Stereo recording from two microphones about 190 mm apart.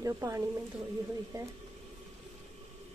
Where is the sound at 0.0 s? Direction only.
20° right (ahead or behind).